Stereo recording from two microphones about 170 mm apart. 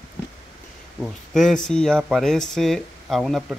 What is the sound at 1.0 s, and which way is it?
Speech, 5° left (ahead or behind).